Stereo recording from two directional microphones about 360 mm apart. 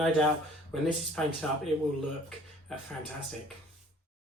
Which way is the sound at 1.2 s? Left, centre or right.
Centre.